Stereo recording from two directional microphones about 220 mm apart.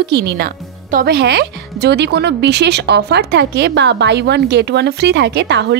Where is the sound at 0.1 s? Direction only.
50° right (ahead or behind).